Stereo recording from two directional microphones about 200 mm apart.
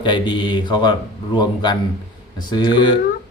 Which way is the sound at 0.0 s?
25° left (ahead or behind).